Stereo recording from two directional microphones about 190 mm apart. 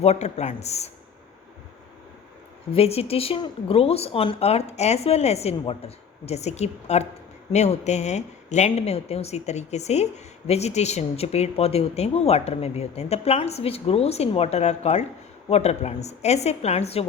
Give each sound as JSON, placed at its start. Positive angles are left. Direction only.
{"t": 0.0, "sound": "a woman's voice", "side_deg": 35}
{"t": 2.7, "sound": "a woman's voice", "side_deg": 30}